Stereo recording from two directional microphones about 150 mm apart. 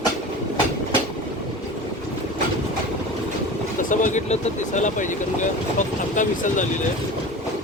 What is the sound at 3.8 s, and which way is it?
Speech, 60° left (ahead or behind).